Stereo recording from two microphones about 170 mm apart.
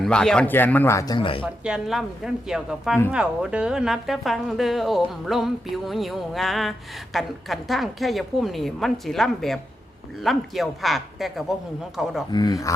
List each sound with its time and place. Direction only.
0.0 s speech: 5° left (ahead or behind); by 1.5 s 30° left (ahead or behind)
1.6 s a woman's voice: 5° right (ahead or behind)
12.3 s speech: 25° left (ahead or behind)